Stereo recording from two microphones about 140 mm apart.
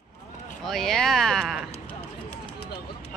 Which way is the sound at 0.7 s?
5° left (ahead or behind).